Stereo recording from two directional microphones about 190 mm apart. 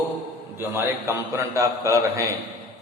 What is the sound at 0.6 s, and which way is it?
A man's voice, 15° right (ahead or behind).